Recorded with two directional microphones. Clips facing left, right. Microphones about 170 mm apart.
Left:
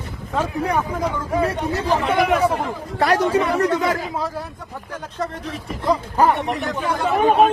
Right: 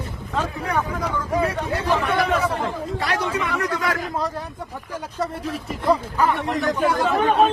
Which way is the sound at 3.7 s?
25° left (ahead or behind).